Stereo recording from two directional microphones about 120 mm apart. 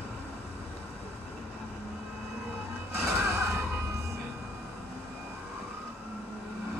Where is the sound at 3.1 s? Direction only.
20° right (ahead or behind).